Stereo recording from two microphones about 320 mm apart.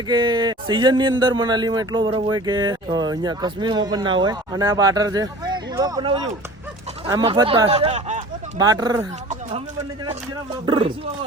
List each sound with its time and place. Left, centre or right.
0.1 s speech: centre
10.7 s speech: centre